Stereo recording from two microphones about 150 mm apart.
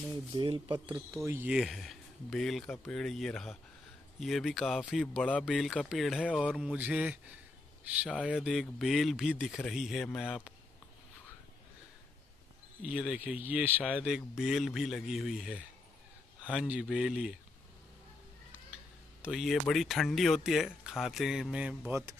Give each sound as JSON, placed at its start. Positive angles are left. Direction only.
{"t": 0.3, "sound": "speech", "side_deg": -30}
{"t": 0.7, "sound": "speech", "side_deg": -10}
{"t": 1.5, "sound": "speech", "side_deg": 0}
{"t": 2.7, "sound": "speech", "side_deg": 15}
{"t": 3.0, "sound": "speech", "side_deg": 0}
{"t": 10.0, "sound": "speech", "side_deg": 10}
{"t": 12.8, "sound": "speech", "side_deg": -5}
{"t": 16.6, "sound": "speech", "side_deg": -5}
{"t": 19.2, "sound": "speech", "side_deg": 0}